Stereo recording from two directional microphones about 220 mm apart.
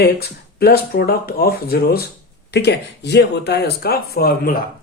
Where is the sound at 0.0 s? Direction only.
45° left (ahead or behind).